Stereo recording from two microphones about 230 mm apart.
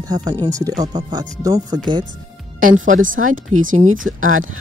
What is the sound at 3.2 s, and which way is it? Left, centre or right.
Speech, right.